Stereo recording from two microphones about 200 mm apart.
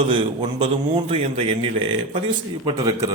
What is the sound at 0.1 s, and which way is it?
A man's voice, 25° right (ahead or behind).